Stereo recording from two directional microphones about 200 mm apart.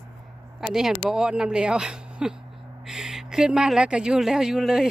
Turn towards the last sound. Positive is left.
turn(degrees=0)  # may be behind; listen again after turning